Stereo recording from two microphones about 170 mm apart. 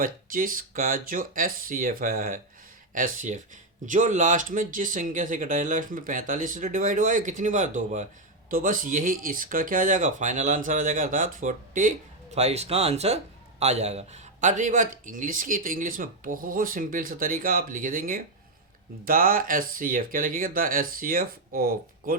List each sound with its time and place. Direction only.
0.0 s speech: 55° right (ahead or behind)